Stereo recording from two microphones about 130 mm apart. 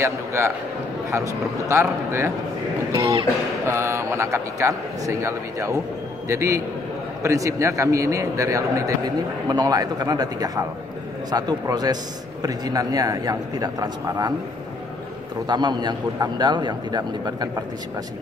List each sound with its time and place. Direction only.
0.0 s a man's voice: 20° right (ahead or behind)
2.9 s a man's voice: 40° right (ahead or behind)
3.6 s a man's voice: 20° right (ahead or behind)
15.4 s a man's voice: 35° right (ahead or behind)